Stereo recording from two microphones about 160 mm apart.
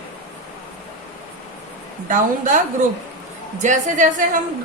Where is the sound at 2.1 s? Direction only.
55° right (ahead or behind).